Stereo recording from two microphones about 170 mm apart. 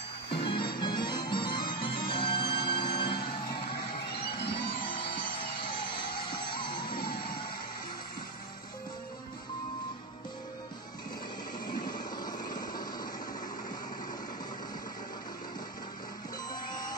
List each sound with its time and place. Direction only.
0.4 s music: 30° left (ahead or behind)
6.5 s music: 30° left (ahead or behind)
12.2 s vehicle: 25° left (ahead or behind)